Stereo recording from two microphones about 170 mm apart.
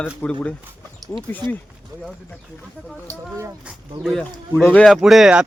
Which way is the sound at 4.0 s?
Centre (ahead or behind).